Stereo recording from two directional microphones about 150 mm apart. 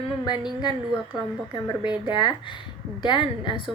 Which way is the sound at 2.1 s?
30° left (ahead or behind).